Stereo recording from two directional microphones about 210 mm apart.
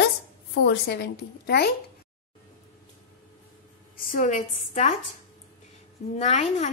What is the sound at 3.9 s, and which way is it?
A woman's voice, 40° left (ahead or behind).